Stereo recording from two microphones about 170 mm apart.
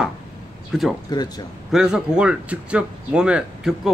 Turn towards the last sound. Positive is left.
turn(degrees=-5)  # may be behind; listen again after turning